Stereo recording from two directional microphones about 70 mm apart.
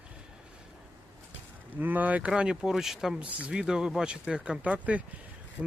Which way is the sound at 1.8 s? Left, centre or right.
Right.